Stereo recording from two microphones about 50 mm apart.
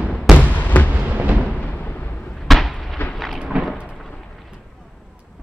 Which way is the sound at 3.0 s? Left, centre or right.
Left.